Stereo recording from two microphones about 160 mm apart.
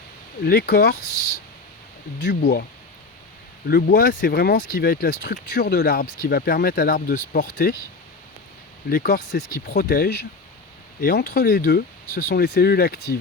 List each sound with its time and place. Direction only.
0.4 s speech: 85° left
2.1 s speech: 90° left
3.7 s speech: 70° left (ahead or behind)
8.9 s speech: 80° left